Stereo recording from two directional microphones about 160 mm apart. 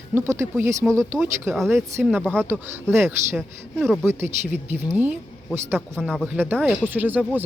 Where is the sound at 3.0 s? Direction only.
15° right (ahead or behind).